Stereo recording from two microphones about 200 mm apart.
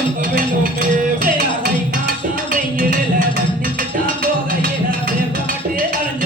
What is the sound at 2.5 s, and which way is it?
Music, 45° right (ahead or behind).